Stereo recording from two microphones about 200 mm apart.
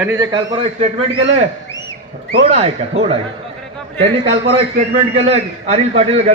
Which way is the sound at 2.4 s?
30° right (ahead or behind).